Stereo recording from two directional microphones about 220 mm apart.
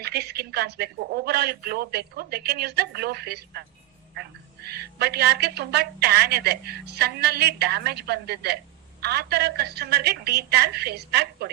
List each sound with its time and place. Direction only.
0.0 s a woman's voice: 45° right (ahead or behind)
4.7 s a woman's voice: 45° right (ahead or behind)